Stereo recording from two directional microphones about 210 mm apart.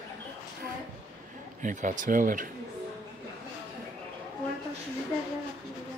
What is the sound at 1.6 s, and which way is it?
Speech, 35° right (ahead or behind).